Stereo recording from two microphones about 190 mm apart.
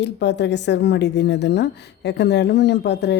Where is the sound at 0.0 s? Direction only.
65° left (ahead or behind).